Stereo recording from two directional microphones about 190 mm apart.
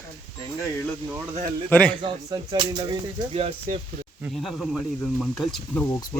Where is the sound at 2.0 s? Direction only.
25° right (ahead or behind).